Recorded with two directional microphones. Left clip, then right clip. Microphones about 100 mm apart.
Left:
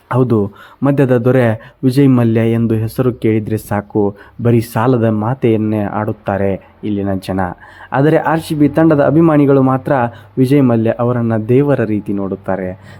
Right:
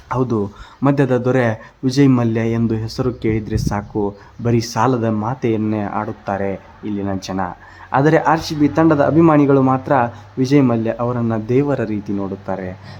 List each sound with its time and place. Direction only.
0.1 s a man's voice: 30° left (ahead or behind)